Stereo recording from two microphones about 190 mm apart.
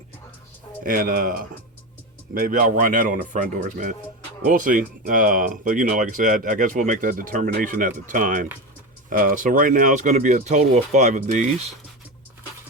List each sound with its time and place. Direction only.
0.9 s speech: 50° right (ahead or behind)